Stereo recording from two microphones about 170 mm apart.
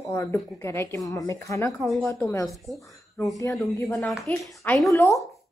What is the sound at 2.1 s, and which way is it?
Speech, 20° left (ahead or behind).